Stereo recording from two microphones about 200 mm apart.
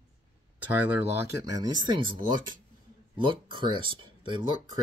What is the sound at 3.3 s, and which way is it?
Speech, 25° right (ahead or behind).